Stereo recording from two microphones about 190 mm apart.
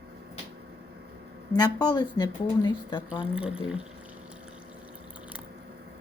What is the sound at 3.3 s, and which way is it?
Speech, 5° right (ahead or behind).